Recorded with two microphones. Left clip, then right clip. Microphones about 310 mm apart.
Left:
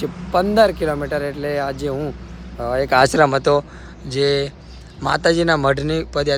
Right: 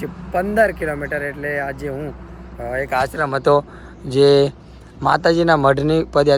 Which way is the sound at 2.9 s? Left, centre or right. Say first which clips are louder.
Left 6 dB; left.